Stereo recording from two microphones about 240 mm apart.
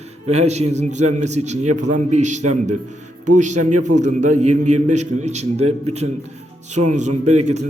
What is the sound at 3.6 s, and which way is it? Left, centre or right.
Speech, right.